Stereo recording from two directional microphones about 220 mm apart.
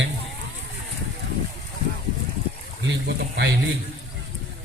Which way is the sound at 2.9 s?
50° right (ahead or behind).